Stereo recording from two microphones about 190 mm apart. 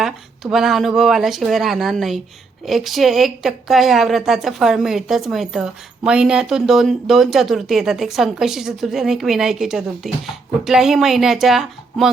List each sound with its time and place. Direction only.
0.0 s a woman's voice: centre (ahead or behind)